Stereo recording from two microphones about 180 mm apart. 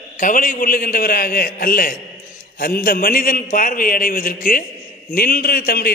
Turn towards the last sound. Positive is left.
turn(degrees=55)  # may be behind; listen again after turning